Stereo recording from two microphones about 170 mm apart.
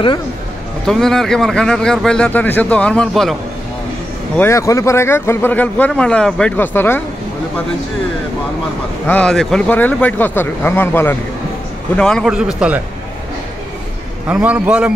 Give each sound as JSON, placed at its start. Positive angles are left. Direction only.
{"t": 0.8, "sound": "speech", "side_deg": 5}
{"t": 4.4, "sound": "speech", "side_deg": 15}
{"t": 9.0, "sound": "speech", "side_deg": 5}
{"t": 14.2, "sound": "a man's voice", "side_deg": -10}